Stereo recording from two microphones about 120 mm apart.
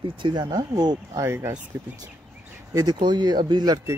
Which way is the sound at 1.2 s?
20° right (ahead or behind).